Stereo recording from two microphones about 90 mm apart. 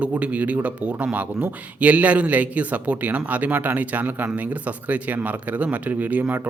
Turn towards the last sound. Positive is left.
turn(degrees=-20)  # may be behind; listen again after turning